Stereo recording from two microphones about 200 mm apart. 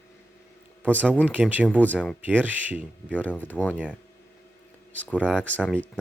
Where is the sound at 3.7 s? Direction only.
5° right (ahead or behind).